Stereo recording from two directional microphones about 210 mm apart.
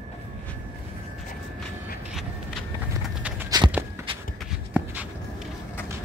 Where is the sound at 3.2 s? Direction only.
5° right (ahead or behind).